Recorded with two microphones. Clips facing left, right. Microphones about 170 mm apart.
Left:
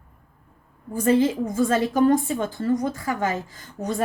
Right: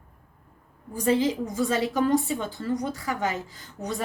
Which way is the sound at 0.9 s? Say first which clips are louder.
Left 4 dB; 50° left (ahead or behind).